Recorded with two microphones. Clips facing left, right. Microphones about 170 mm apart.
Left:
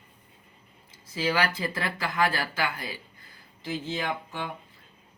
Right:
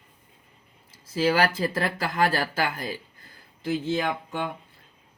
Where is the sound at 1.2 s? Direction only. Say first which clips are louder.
Right 5 dB; 45° right (ahead or behind).